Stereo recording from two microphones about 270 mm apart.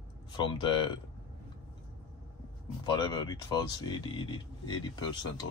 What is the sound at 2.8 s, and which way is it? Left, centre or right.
Speech, centre.